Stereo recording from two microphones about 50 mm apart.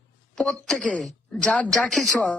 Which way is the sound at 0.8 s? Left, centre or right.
Left.